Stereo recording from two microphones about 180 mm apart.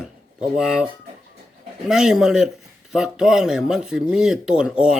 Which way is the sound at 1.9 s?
5° right (ahead or behind).